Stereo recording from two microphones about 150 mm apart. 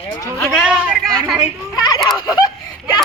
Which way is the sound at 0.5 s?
Centre (ahead or behind).